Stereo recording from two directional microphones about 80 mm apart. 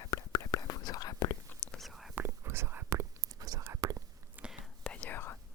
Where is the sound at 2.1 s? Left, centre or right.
Right.